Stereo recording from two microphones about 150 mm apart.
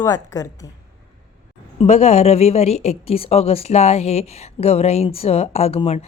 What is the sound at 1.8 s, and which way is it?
A woman's voice, 45° left (ahead or behind).